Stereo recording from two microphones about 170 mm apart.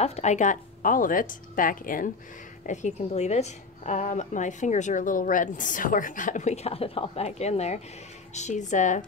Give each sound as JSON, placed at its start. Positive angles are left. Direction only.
{"t": 0.0, "sound": "a woman's voice", "side_deg": 40}